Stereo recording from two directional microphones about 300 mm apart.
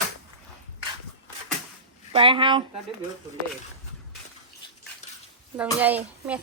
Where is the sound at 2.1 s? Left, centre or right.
Centre.